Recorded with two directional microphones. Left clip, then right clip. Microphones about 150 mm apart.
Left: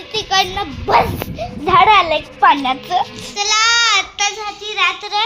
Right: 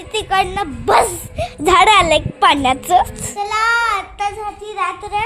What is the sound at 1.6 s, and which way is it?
A woman's voice, 60° right (ahead or behind).